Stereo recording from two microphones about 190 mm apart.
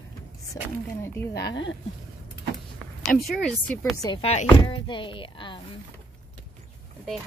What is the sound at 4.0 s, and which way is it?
Speech, 25° left (ahead or behind).